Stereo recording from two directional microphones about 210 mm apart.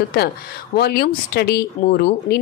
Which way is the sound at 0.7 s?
50° left (ahead or behind).